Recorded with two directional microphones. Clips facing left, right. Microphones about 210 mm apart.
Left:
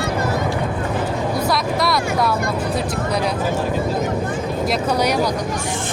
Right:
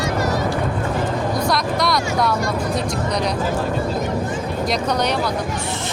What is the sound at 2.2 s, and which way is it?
Music, centre (ahead or behind).